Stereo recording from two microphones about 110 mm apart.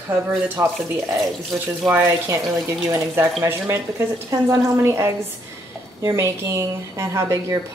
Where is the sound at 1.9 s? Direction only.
25° right (ahead or behind).